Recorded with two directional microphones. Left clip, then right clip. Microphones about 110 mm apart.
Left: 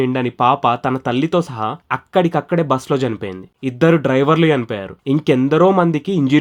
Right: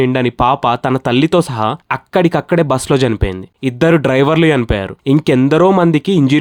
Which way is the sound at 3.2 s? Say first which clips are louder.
Right 5 dB; 40° right (ahead or behind).